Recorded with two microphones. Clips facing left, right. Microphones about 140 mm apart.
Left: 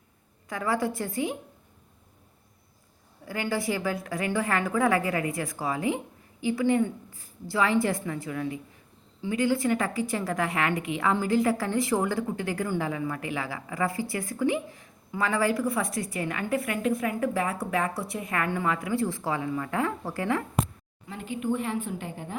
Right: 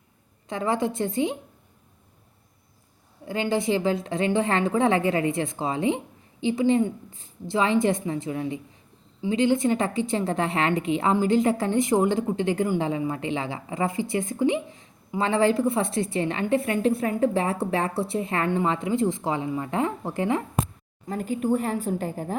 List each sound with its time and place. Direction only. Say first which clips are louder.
0.4 s a woman's voice: right 3 dB; 20° right (ahead or behind)
3.2 s a woman's voice: right 5 dB; 20° right (ahead or behind)
21.1 s a woman's voice: right 5 dB; 40° right (ahead or behind)